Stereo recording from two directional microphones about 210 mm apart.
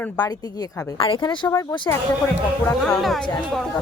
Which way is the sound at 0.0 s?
15° left (ahead or behind).